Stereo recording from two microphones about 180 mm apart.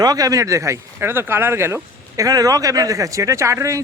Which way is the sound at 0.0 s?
20° right (ahead or behind).